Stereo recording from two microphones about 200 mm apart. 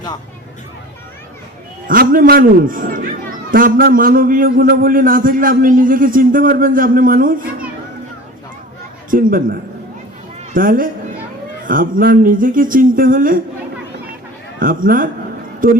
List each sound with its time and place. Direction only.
1.9 s a man's voice: 45° right (ahead or behind)
9.0 s a man's voice: 45° right (ahead or behind)
14.6 s a man's voice: 45° right (ahead or behind)